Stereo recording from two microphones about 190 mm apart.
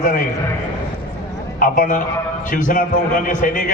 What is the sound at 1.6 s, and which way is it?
A man's voice, 45° left (ahead or behind).